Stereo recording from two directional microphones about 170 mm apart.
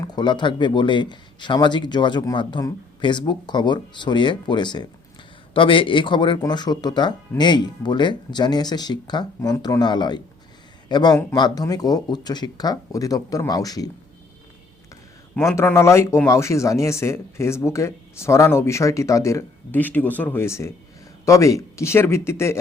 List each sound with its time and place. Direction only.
0.0 s speech: 25° left (ahead or behind)
15.4 s speech: 15° left (ahead or behind)